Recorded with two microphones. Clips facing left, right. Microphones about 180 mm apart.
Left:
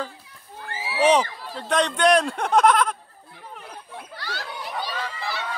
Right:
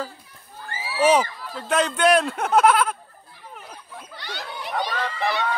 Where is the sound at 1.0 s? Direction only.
5° right (ahead or behind).